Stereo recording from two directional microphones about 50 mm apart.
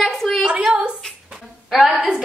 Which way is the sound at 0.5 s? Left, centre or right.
Right.